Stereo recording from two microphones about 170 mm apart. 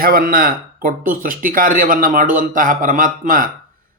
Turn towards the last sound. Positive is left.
turn(degrees=-55)  # may be behind; listen again after turning